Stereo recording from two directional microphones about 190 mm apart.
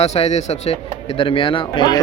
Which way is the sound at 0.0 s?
35° left (ahead or behind).